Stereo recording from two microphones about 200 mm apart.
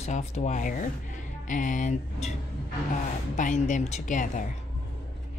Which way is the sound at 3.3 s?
40° left (ahead or behind).